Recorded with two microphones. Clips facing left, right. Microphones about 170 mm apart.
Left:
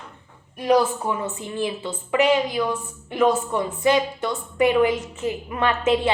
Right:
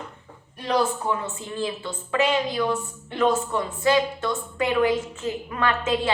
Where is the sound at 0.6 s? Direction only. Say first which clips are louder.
Left 4 dB; 15° left (ahead or behind).